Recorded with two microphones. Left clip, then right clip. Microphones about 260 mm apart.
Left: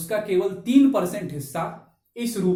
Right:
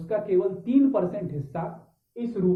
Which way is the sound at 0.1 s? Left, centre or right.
Left.